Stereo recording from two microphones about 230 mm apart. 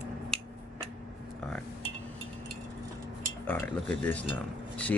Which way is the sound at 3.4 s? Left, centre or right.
Centre.